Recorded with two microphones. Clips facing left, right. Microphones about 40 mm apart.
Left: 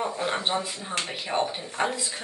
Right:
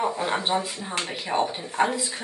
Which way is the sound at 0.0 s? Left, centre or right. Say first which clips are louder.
Right 2 dB; centre.